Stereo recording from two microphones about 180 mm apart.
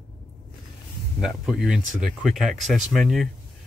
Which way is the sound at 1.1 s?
5° right (ahead or behind).